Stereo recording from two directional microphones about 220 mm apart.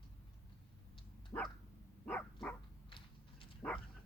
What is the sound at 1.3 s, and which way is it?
Dog, 15° left (ahead or behind).